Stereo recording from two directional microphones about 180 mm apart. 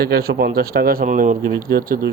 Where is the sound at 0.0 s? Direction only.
55° right (ahead or behind).